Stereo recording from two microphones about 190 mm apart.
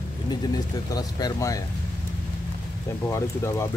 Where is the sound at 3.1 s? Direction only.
15° left (ahead or behind).